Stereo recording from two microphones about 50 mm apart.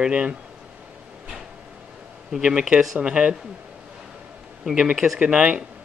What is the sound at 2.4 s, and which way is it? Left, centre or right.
Speech, centre.